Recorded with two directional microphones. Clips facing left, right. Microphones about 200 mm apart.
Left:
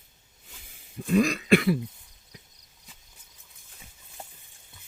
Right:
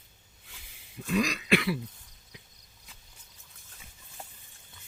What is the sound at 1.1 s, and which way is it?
Throat clearing, 50° left (ahead or behind).